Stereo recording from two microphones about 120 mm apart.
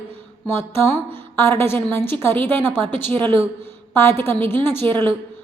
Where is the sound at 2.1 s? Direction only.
20° left (ahead or behind).